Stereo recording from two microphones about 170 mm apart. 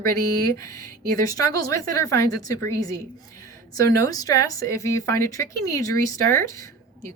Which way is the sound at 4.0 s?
20° left (ahead or behind).